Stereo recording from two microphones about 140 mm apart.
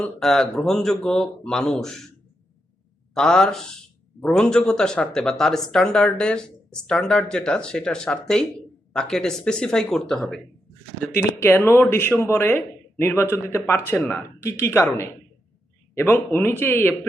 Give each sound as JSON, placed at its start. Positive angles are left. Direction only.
{"t": 0.0, "sound": "speech", "side_deg": 5}
{"t": 3.2, "sound": "speech", "side_deg": 5}
{"t": 11.3, "sound": "speech", "side_deg": 15}
{"t": 16.0, "sound": "speech", "side_deg": 15}